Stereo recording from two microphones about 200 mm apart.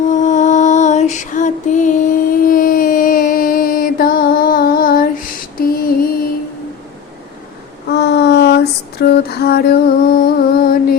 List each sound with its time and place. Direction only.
0.1 s music: 40° left (ahead or behind)
7.9 s female singing: 60° left (ahead or behind)